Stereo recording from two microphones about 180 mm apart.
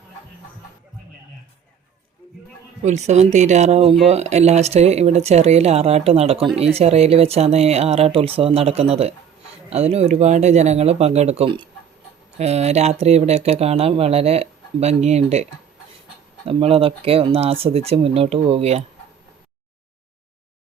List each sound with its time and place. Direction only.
2.8 s speech: 40° right (ahead or behind)
16.5 s speech: 30° right (ahead or behind)